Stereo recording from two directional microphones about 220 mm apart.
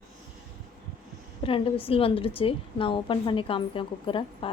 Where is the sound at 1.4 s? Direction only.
25° left (ahead or behind).